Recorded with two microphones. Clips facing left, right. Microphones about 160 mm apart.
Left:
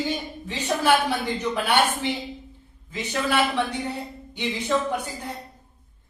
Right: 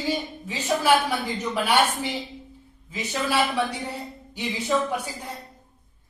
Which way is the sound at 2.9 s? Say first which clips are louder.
Left 1 dB; 10° right (ahead or behind).